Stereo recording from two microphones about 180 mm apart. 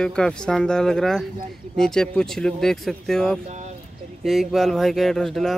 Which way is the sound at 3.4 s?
40° right (ahead or behind).